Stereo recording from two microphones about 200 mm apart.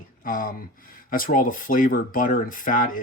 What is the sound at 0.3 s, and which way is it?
Speech, 45° left (ahead or behind).